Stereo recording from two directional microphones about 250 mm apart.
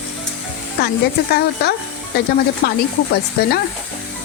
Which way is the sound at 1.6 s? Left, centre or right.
Left.